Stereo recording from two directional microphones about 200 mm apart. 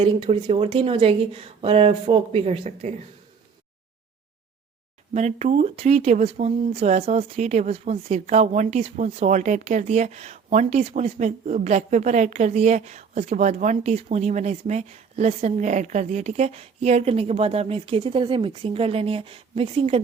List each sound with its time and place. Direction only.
0.0 s speech: 25° right (ahead or behind)
5.1 s speech: 35° right (ahead or behind)